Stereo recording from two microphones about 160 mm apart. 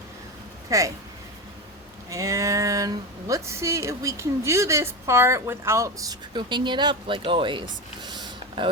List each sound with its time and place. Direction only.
0.7 s speech: 20° right (ahead or behind)
2.0 s speech: 20° right (ahead or behind)
8.0 s a sound: 30° right (ahead or behind)